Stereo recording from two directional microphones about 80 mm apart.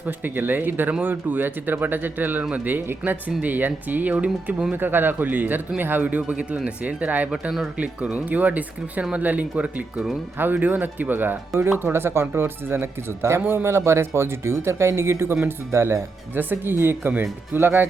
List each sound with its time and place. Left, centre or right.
0.0 s speech: right